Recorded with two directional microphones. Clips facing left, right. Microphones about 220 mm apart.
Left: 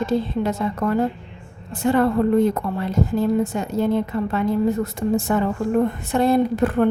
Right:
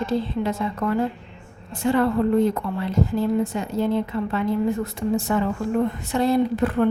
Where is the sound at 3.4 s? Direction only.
45° left (ahead or behind).